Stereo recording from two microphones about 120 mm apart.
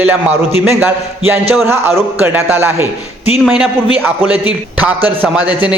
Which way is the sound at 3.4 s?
5° right (ahead or behind).